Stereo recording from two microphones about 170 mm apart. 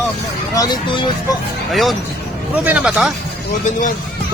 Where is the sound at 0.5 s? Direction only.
25° left (ahead or behind).